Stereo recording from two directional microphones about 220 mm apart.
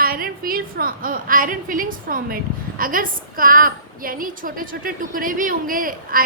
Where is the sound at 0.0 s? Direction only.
40° right (ahead or behind).